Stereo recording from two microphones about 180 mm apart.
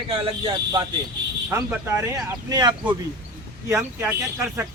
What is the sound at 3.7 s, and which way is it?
Speech, 10° right (ahead or behind).